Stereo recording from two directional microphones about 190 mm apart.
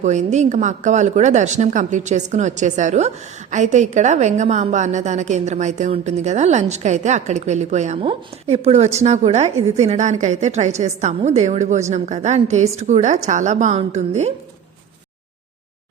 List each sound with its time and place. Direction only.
0.0 s a woman's voice: 40° right (ahead or behind)